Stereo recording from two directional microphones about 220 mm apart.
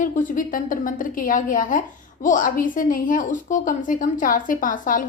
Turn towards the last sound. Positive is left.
turn(degrees=40)  # may be behind; listen again after turning